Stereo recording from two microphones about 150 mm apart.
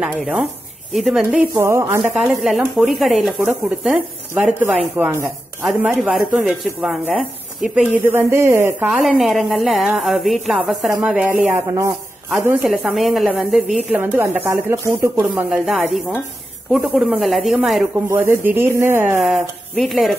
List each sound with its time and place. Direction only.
0.0 s a woman's voice: 5° right (ahead or behind)
1.5 s a woman's voice: 20° right (ahead or behind)
2.8 s a woman's voice: centre (ahead or behind)
4.9 s chopping: 15° right (ahead or behind)
5.7 s a woman's voice: 10° right (ahead or behind)
5.9 s a woman's voice: centre (ahead or behind)
8.0 s a woman's voice: 15° right (ahead or behind)
9.0 s a woman's voice: centre (ahead or behind)
11.4 s a woman's voice: 20° right (ahead or behind)
12.6 s a woman's voice: centre (ahead or behind)
18.0 s a woman's voice: 15° right (ahead or behind)
19.2 s a woman's voice: centre (ahead or behind)